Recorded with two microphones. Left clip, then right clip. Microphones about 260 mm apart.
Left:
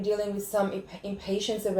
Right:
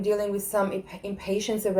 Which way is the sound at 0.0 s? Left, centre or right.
Right.